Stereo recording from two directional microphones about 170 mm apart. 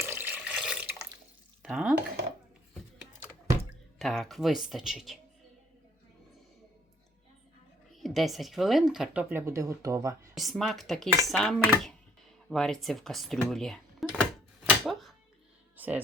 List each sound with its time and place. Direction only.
0.0 s water tap: 10° right (ahead or behind)
1.6 s a sound: 5° right (ahead or behind)
3.9 s speech: centre (ahead or behind)
8.0 s speech: centre (ahead or behind)
9.3 s speech: 15° right (ahead or behind)
10.3 s speech: centre (ahead or behind)
13.5 s music: centre (ahead or behind)
15.8 s music: 10° right (ahead or behind)